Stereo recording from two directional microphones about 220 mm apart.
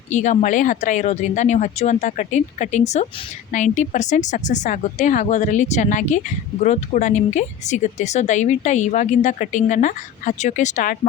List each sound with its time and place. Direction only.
0.1 s speech: 35° left (ahead or behind)